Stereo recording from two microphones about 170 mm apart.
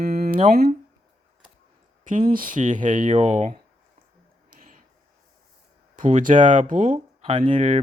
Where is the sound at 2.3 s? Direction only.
55° right (ahead or behind).